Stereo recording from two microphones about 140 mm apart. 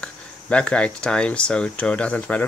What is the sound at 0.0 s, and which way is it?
Speech, 10° left (ahead or behind).